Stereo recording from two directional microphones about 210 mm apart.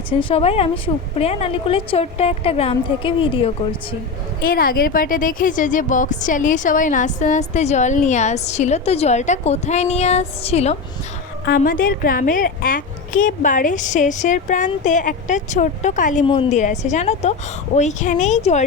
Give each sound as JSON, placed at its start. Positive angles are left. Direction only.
{"t": 0.1, "sound": "a woman's voice", "side_deg": 25}
{"t": 4.4, "sound": "a woman's voice", "side_deg": 45}
{"t": 11.4, "sound": "a woman's voice", "side_deg": 45}
{"t": 16.2, "sound": "a woman's voice", "side_deg": 25}